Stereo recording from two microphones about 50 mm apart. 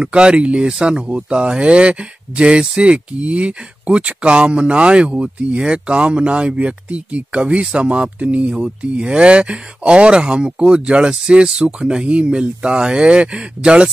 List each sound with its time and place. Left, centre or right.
0.0 s speech: centre